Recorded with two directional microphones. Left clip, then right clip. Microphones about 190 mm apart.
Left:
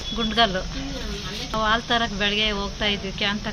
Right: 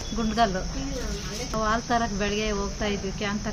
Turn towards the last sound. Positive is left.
turn(degrees=-5)  # may be behind; listen again after turning